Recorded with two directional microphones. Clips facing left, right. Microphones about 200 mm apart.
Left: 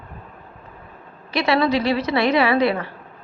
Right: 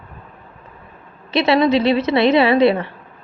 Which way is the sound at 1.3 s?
25° right (ahead or behind).